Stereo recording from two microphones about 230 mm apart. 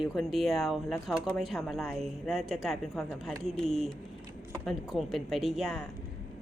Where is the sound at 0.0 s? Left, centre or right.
Centre.